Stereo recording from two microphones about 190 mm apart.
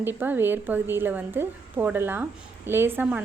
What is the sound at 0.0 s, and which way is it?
Speech, 10° right (ahead or behind).